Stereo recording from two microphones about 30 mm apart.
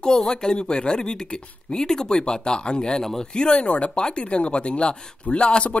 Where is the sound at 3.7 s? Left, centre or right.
Left.